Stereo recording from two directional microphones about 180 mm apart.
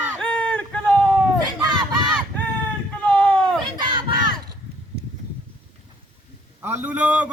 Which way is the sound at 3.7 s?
25° right (ahead or behind).